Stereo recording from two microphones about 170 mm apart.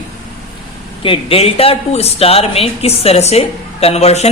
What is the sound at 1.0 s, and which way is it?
A woman's voice, 35° left (ahead or behind).